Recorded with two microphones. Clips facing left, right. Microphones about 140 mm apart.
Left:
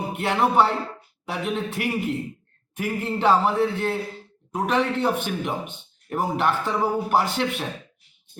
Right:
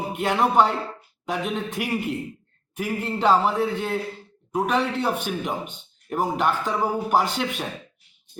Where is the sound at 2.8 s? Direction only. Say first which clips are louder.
Even; centre (ahead or behind).